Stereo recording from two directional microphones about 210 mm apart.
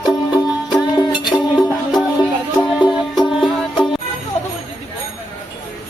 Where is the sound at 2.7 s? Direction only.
5° right (ahead or behind).